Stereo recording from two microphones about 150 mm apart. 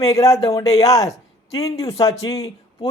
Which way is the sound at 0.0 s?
20° left (ahead or behind).